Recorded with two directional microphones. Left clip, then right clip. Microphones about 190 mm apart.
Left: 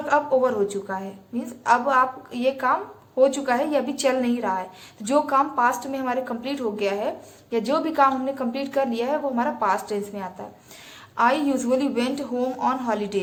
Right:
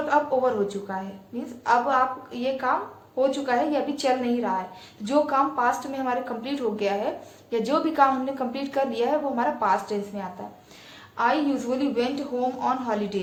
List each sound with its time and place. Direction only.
0.1 s a woman's voice: 25° left (ahead or behind)